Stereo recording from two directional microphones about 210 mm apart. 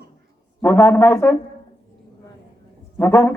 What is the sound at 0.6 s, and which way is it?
Speech, 10° left (ahead or behind).